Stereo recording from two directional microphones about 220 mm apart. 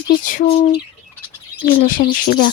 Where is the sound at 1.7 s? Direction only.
40° left (ahead or behind).